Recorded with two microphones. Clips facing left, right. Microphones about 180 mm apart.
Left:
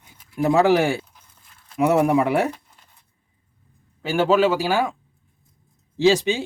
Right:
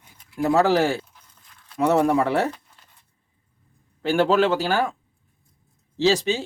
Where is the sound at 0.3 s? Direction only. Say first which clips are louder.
Left 2 dB; 15° left (ahead or behind).